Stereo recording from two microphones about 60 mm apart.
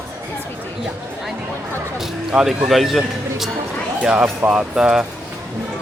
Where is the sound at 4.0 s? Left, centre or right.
Right.